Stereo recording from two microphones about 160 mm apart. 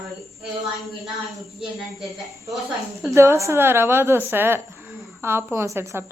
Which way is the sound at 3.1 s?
15° right (ahead or behind).